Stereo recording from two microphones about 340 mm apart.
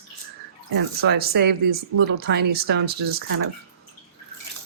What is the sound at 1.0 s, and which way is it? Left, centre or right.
Speech, right.